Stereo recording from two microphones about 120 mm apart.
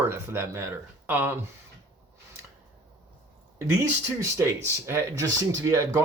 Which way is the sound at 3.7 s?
25° right (ahead or behind).